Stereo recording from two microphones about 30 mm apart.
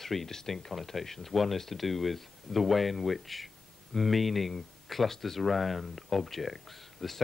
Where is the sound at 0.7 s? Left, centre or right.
Centre.